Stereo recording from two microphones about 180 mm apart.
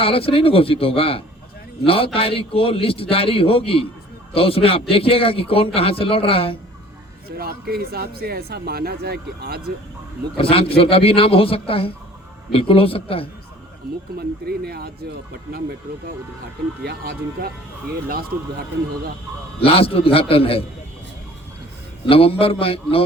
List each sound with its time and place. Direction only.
0.0 s a man's voice: 30° left (ahead or behind)
7.3 s speech: 60° right (ahead or behind)
10.3 s a man's voice: 30° left (ahead or behind)
14.2 s speech: 60° right (ahead or behind)
19.5 s a man's voice: 30° left (ahead or behind)
22.1 s a man's voice: 30° left (ahead or behind)